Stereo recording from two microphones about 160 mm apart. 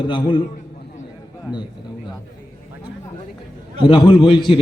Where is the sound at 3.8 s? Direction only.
30° left (ahead or behind).